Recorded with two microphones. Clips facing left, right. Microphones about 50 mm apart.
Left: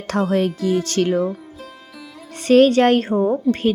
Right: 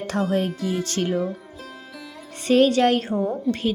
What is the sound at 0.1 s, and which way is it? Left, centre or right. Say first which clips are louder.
Speech: left 5 dB; left.